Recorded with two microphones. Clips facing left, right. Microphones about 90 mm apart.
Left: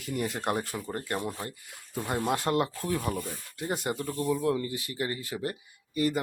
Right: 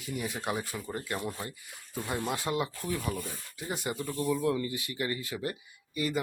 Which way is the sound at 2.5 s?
55° left (ahead or behind).